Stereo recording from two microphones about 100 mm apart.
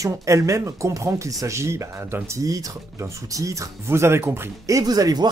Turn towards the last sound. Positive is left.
turn(degrees=-40)  # may be behind; listen again after turning